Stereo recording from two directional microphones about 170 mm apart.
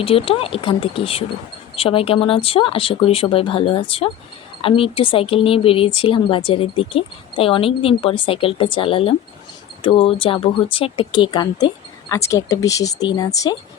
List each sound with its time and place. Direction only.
0.0 s speech: 35° left (ahead or behind)